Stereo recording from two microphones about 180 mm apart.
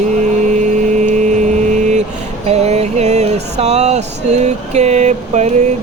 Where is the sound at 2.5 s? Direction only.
35° right (ahead or behind).